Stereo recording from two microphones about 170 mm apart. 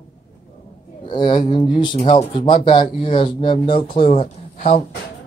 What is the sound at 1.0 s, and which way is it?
Speech, 25° left (ahead or behind).